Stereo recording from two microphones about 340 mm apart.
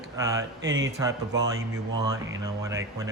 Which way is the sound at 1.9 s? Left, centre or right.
Centre.